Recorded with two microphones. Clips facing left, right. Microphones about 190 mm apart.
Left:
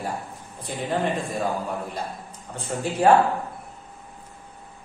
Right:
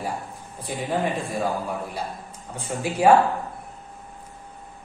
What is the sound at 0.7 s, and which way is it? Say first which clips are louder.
Speech: right 1 dB; 10° right (ahead or behind).